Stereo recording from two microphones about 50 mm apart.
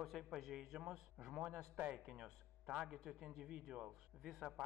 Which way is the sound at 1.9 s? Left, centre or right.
Centre.